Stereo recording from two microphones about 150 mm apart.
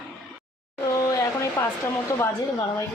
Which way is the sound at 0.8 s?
20° left (ahead or behind).